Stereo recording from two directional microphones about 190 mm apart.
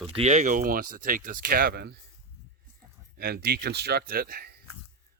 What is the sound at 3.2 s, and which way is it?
Speech, 55° right (ahead or behind).